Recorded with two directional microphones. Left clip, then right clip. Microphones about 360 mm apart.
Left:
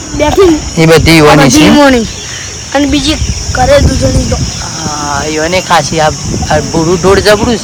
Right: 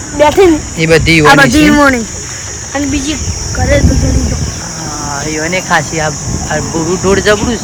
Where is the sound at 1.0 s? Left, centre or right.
Centre.